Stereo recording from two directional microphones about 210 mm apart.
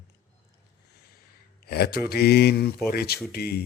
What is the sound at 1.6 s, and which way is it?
A man's voice, 50° left (ahead or behind).